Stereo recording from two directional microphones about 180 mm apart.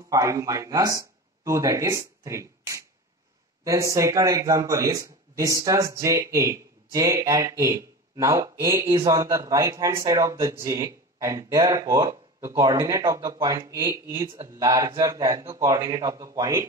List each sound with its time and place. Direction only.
0.1 s a man's voice: 15° right (ahead or behind)